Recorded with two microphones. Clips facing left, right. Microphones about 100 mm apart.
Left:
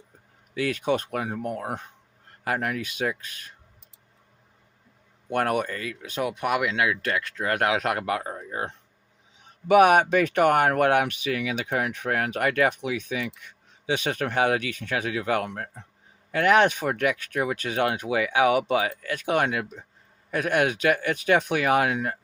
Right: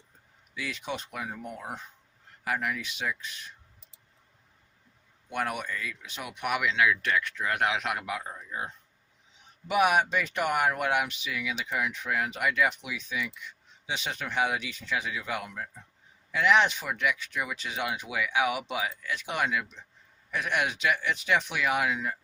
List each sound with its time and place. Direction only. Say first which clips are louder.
0.6 s speech: left 11 dB; 55° left (ahead or behind)
5.3 s speech: left 7 dB; 50° left (ahead or behind)
8.1 s speech: left 6 dB; 65° left (ahead or behind)
9.6 s speech: left 7 dB; 55° left (ahead or behind)
16.3 s speech: left 4 dB; 50° left (ahead or behind)